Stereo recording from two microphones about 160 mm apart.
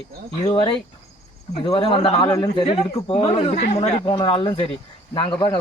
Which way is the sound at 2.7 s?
40° left (ahead or behind).